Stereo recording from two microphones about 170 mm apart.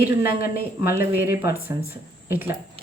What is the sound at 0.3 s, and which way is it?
Speech, 60° left (ahead or behind).